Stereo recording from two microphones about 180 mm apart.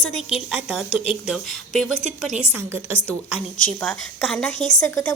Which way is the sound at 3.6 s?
5° left (ahead or behind).